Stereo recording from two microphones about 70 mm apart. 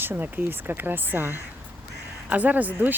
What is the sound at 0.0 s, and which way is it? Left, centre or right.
Speech, right.